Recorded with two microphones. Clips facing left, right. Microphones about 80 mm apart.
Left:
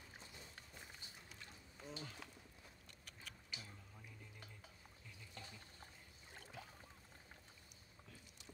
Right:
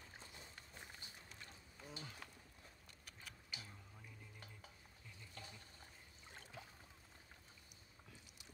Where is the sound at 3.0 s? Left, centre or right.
Centre.